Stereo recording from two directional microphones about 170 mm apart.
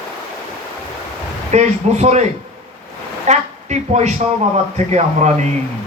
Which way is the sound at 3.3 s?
40° right (ahead or behind).